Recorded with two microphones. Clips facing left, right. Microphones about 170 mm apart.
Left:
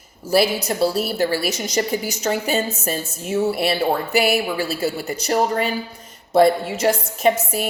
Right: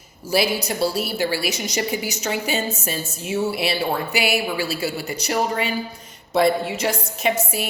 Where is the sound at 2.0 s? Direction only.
50° left (ahead or behind).